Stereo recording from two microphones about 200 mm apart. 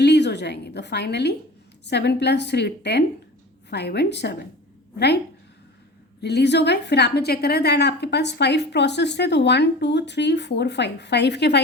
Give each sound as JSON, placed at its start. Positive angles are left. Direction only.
{"t": 0.0, "sound": "a woman's voice", "side_deg": 60}
{"t": 6.2, "sound": "a woman's voice", "side_deg": 55}